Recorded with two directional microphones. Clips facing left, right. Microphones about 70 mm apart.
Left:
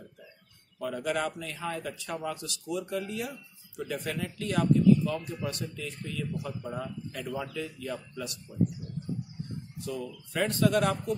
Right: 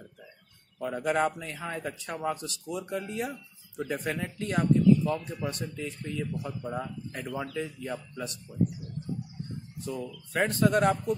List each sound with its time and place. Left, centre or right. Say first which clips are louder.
0.7 s speech: right 3 dB; right
9.8 s speech: right 1 dB; right